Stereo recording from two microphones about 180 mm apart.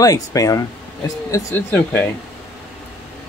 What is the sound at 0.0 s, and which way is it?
Speech, 20° left (ahead or behind).